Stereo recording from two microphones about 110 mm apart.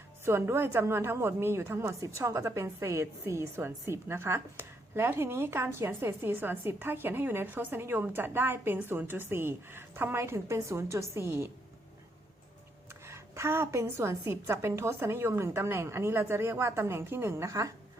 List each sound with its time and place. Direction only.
0.3 s a woman's voice: 25° right (ahead or behind)
12.9 s a woman's voice: 25° right (ahead or behind)